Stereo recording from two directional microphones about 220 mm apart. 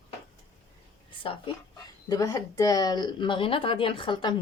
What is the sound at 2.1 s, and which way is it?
Speech, 15° left (ahead or behind).